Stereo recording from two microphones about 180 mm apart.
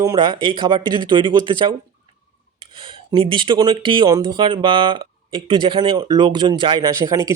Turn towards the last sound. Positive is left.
turn(degrees=-15)  # may be behind; listen again after turning